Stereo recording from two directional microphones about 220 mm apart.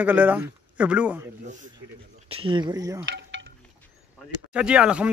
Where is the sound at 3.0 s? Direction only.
55° right (ahead or behind).